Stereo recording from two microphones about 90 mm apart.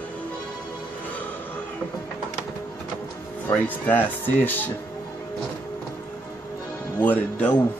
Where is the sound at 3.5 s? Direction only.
20° left (ahead or behind).